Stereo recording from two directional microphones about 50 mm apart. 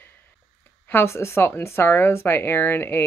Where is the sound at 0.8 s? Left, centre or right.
Left.